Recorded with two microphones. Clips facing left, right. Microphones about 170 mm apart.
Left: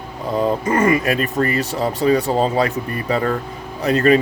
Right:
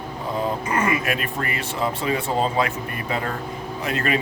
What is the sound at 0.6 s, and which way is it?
Speech, 40° left (ahead or behind).